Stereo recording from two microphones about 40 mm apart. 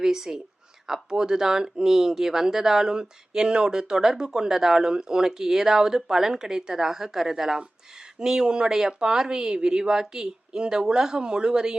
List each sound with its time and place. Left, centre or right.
0.0 s speech: centre